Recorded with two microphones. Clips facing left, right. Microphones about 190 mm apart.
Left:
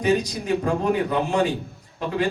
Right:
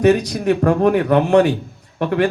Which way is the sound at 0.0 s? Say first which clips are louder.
Right 7 dB; 65° right (ahead or behind).